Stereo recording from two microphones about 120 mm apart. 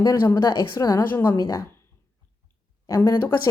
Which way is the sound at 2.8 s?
30° left (ahead or behind).